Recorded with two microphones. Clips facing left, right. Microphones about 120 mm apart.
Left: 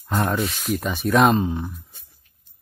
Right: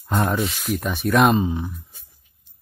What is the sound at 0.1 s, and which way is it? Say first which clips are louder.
Speech: right 1 dB; centre (ahead or behind).